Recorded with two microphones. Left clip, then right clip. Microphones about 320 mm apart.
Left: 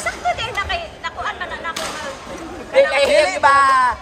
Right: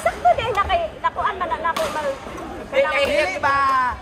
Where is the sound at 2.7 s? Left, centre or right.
Left.